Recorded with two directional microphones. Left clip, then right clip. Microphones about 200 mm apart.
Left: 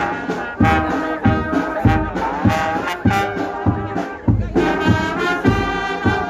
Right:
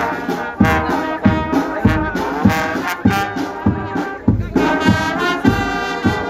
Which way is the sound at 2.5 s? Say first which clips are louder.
Even; 60° right (ahead or behind).